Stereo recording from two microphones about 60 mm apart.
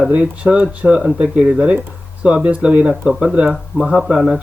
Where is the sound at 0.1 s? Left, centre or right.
Centre.